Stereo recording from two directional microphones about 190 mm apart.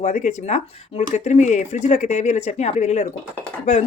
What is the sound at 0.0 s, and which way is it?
Speech, 40° left (ahead or behind).